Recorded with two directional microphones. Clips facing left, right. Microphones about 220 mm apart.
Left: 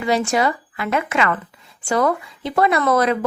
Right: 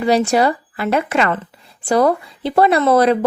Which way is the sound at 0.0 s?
35° right (ahead or behind).